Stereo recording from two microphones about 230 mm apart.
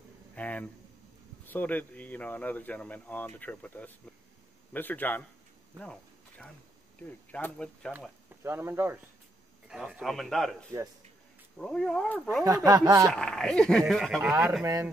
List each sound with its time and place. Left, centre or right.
0.4 s a sound: centre
1.4 s speech: centre
7.9 s speech: centre
10.7 s speech: centre
11.5 s speech: centre
12.4 s speech: centre
13.1 s speech: centre
14.6 s speech: centre